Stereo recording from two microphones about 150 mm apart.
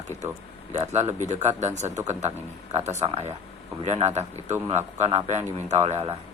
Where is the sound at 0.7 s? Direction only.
50° right (ahead or behind).